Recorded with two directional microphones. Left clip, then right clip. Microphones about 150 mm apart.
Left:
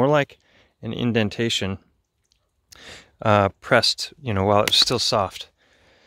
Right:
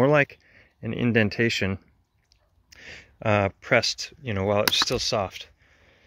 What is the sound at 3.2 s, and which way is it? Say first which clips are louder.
Speech: left 5 dB; 40° left (ahead or behind).